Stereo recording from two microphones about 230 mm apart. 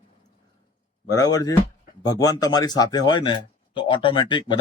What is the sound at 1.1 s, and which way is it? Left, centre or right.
Speech, centre.